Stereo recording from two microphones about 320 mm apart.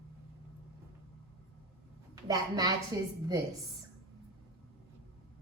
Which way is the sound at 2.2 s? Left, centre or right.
Centre.